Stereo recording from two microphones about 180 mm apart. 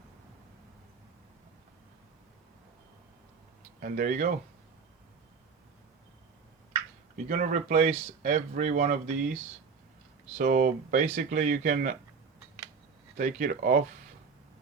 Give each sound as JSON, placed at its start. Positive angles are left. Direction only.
{"t": 3.8, "sound": "speech", "side_deg": -50}
{"t": 7.3, "sound": "speech", "side_deg": -45}
{"t": 13.1, "sound": "speech", "side_deg": -50}